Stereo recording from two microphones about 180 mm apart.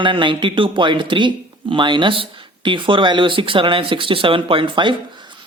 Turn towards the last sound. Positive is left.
turn(degrees=-25)  # may be behind; listen again after turning